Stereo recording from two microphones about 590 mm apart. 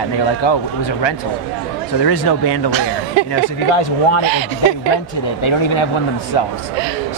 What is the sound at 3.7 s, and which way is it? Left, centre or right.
Speech, left.